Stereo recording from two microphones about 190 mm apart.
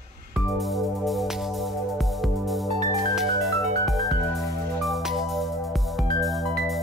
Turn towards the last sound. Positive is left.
turn(degrees=0)  # may be behind; listen again after turning